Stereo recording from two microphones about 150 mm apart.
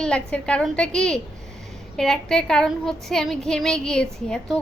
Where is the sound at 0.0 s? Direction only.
5° left (ahead or behind).